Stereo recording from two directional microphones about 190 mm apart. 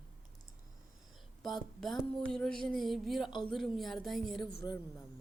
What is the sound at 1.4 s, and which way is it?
Speech, centre (ahead or behind).